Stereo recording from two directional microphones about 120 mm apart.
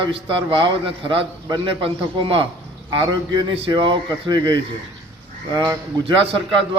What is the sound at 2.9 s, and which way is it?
A man's voice, 40° right (ahead or behind).